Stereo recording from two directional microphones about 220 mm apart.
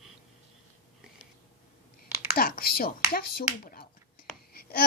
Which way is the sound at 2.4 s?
40° left (ahead or behind).